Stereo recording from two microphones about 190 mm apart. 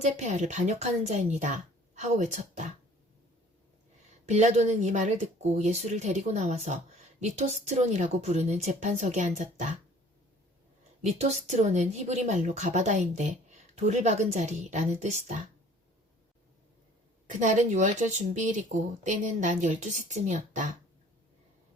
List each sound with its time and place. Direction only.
0.0 s speech: 40° right (ahead or behind)
4.3 s speech: 35° right (ahead or behind)
11.0 s speech: 35° right (ahead or behind)
17.2 s speech: 40° right (ahead or behind)